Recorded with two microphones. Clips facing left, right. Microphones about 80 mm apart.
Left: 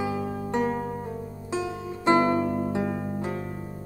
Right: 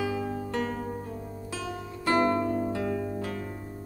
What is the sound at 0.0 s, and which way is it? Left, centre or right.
Music, left.